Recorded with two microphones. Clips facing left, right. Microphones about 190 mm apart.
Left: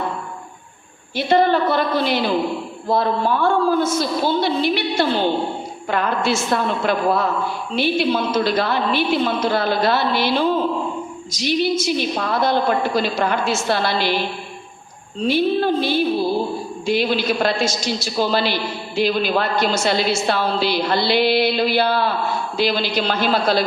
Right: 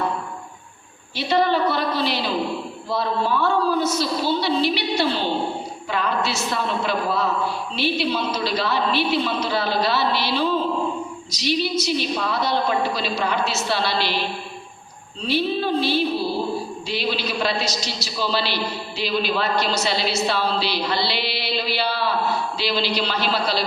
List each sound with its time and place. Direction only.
1.1 s a woman's voice: 50° left (ahead or behind)
15.3 s a woman's voice: 50° left (ahead or behind)